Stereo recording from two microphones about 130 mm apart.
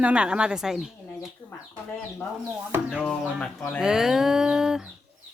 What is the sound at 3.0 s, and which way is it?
Speech, 5° left (ahead or behind).